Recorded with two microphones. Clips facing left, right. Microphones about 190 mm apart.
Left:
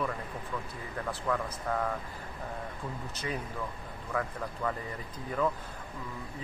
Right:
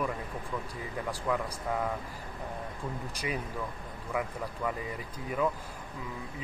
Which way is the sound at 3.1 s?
10° right (ahead or behind).